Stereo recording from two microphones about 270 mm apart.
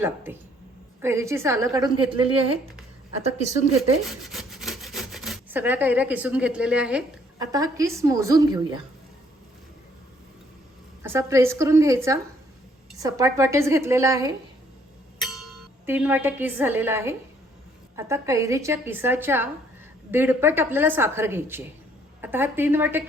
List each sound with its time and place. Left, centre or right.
1.0 s a woman's voice: centre
4.0 s sawing: centre
11.0 s a woman's voice: centre
15.2 s a woman's voice: centre